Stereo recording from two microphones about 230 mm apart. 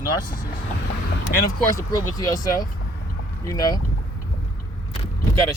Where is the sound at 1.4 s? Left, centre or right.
Centre.